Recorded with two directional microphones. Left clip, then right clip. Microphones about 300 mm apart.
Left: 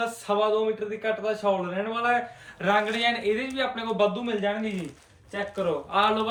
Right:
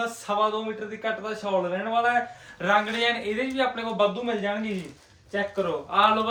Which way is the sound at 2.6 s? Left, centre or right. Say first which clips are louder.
Right 1 dB; centre.